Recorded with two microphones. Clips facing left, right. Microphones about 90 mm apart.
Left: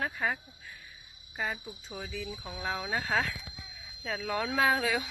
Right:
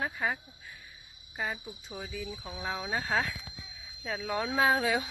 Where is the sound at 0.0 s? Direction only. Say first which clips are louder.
Even; 15° right (ahead or behind).